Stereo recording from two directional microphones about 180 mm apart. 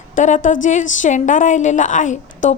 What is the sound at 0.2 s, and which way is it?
A woman's voice, 45° left (ahead or behind).